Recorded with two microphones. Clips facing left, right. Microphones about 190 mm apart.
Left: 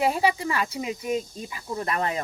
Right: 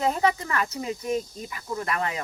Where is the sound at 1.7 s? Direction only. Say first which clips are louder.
Left 1 dB; 35° left (ahead or behind).